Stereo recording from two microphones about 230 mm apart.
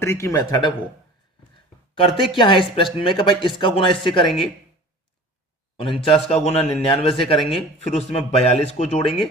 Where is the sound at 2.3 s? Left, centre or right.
Left.